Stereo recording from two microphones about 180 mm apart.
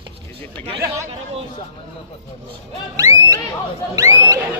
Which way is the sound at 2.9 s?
20° right (ahead or behind).